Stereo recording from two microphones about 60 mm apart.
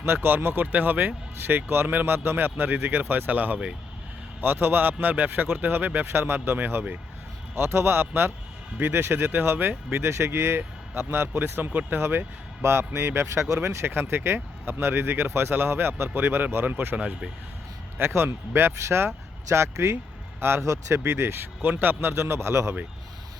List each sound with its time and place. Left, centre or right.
0.0 s speech: right
17.9 s speech: right